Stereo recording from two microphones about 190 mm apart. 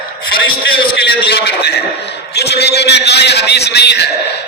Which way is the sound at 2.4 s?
60° left (ahead or behind).